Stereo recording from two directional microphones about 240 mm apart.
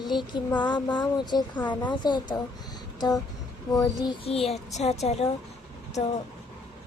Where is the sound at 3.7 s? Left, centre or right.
Centre.